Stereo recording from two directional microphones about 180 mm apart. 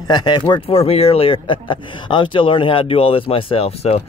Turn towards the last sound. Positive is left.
turn(degrees=35)  # may be behind; listen again after turning